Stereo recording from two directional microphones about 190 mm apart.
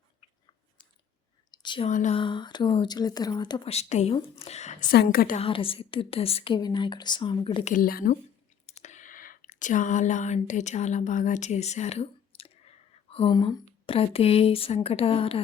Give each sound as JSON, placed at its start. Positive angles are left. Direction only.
{"t": 1.5, "sound": "a sound", "side_deg": 25}
{"t": 1.9, "sound": "speech", "side_deg": 40}
{"t": 2.1, "sound": "speech", "side_deg": 25}
{"t": 4.9, "sound": "speech", "side_deg": 50}
{"t": 5.4, "sound": "speech", "side_deg": 30}
{"t": 7.7, "sound": "speech", "side_deg": 50}
{"t": 8.6, "sound": "speech", "side_deg": 35}